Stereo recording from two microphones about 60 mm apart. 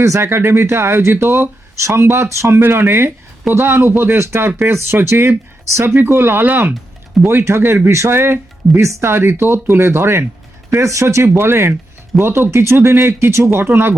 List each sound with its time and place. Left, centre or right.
0.0 s speech: right
7.3 s speech: right
10.7 s speech: right